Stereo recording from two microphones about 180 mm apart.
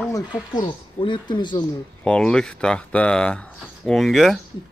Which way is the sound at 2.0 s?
5° left (ahead or behind).